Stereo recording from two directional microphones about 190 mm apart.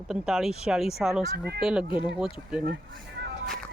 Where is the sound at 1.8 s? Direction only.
25° left (ahead or behind).